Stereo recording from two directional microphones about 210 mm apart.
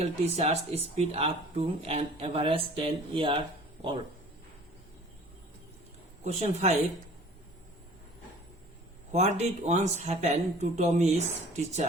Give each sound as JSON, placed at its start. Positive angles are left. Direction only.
{"t": 0.0, "sound": "speech", "side_deg": -30}
{"t": 6.2, "sound": "speech", "side_deg": -30}
{"t": 9.1, "sound": "speech", "side_deg": -30}